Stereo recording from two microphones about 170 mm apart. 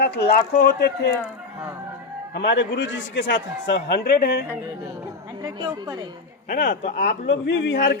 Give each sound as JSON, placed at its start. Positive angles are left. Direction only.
{"t": 0.0, "sound": "speech", "side_deg": 70}
{"t": 2.3, "sound": "a man's voice", "side_deg": 90}
{"t": 5.4, "sound": "a woman's voice", "side_deg": -20}
{"t": 6.5, "sound": "speech", "side_deg": 50}
{"t": 7.3, "sound": "a man's voice", "side_deg": 90}